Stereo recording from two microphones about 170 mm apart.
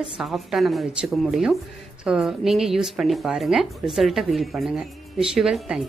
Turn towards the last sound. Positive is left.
turn(degrees=-5)  # may be behind; listen again after turning